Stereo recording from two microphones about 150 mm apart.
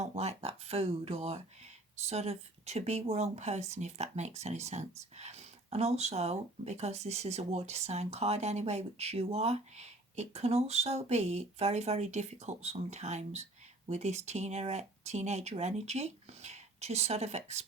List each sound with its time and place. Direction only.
0.0 s speech: 45° right (ahead or behind)